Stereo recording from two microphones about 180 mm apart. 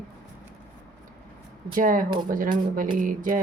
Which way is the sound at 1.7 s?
50° right (ahead or behind).